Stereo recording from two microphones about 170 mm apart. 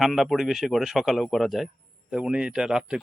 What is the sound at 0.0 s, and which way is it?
A man's voice, centre (ahead or behind).